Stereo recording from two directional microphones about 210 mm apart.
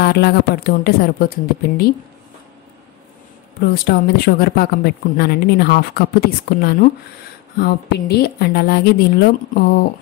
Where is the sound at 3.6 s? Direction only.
50° left (ahead or behind).